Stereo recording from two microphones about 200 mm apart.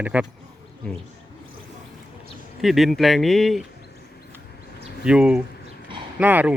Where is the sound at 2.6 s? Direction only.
Centre (ahead or behind).